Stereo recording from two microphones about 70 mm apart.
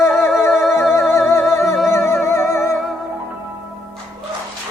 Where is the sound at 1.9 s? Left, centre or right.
Left.